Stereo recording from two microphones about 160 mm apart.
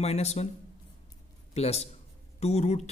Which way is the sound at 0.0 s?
40° left (ahead or behind).